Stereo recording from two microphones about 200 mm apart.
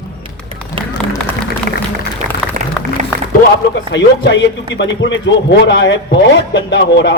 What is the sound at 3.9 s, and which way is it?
Speech, 60° left (ahead or behind).